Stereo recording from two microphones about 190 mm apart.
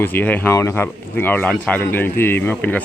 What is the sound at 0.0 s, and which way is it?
Speech, 10° left (ahead or behind).